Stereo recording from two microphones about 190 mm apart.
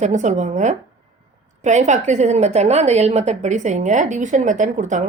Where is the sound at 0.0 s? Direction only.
40° right (ahead or behind).